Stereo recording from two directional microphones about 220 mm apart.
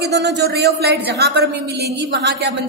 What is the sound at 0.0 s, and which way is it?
A woman's voice, 50° right (ahead or behind).